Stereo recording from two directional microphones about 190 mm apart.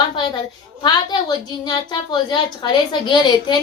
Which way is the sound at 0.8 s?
20° left (ahead or behind).